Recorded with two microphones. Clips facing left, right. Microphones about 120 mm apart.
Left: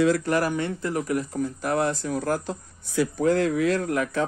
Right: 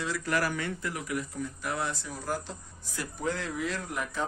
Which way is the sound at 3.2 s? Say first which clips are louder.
Left 10 dB; 55° left (ahead or behind).